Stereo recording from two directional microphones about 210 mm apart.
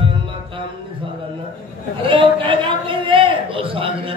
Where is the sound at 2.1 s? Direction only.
25° right (ahead or behind).